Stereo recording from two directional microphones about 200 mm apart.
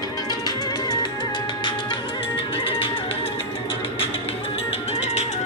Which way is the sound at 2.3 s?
25° left (ahead or behind).